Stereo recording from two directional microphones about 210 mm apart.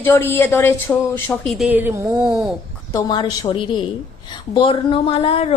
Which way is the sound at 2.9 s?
15° left (ahead or behind).